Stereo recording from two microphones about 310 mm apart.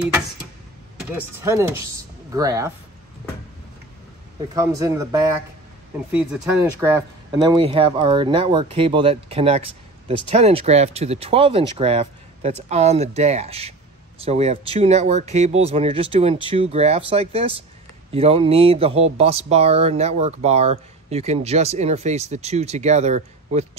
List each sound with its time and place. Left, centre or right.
1.4 s speech: centre
4.6 s speech: centre